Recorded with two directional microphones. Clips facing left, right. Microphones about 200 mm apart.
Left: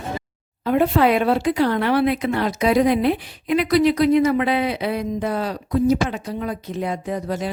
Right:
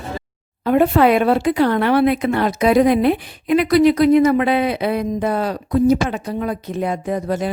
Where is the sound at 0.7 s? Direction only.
55° right (ahead or behind).